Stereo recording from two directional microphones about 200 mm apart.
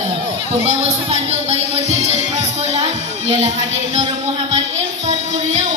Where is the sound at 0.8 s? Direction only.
30° right (ahead or behind).